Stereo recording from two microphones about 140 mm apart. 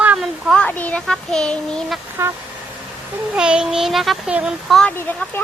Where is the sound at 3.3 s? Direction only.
5° right (ahead or behind).